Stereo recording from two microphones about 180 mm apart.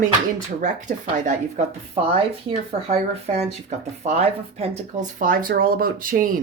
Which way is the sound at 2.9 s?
40° right (ahead or behind).